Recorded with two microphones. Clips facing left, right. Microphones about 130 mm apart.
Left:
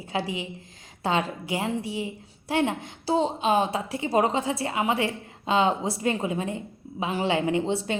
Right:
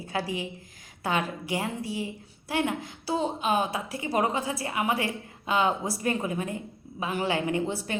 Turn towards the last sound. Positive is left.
turn(degrees=25)  # may be behind; listen again after turning